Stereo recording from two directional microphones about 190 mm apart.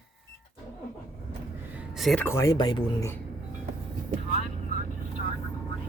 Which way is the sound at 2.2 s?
15° left (ahead or behind).